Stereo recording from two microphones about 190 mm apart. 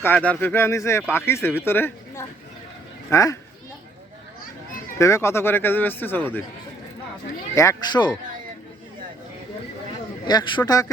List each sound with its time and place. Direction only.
0.0 s speech: 10° left (ahead or behind)
4.9 s speech: 15° left (ahead or behind)
7.5 s speech: 15° left (ahead or behind)
10.2 s a man's voice: 25° left (ahead or behind)